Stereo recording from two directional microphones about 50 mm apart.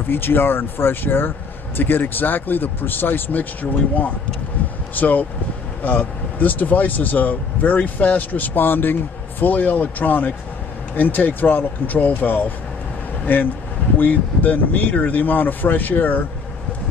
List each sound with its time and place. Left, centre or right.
0.1 s speech: left
4.9 s speech: left